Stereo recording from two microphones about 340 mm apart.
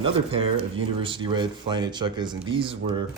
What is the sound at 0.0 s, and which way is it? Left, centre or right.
Speech, centre.